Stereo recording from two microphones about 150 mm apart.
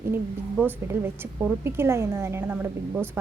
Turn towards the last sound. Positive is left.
turn(degrees=-15)  # may be behind; listen again after turning